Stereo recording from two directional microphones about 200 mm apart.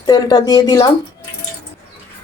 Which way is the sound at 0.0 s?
20° left (ahead or behind).